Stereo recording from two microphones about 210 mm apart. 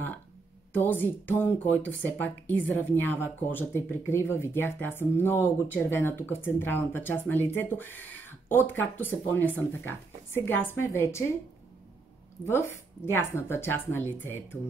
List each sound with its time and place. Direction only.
0.7 s speech: 10° left (ahead or behind)
12.4 s speech: 10° left (ahead or behind)